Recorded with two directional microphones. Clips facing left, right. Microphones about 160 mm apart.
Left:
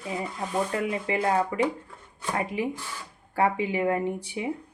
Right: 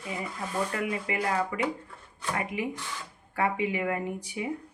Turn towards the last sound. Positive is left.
turn(degrees=30)  # may be behind; listen again after turning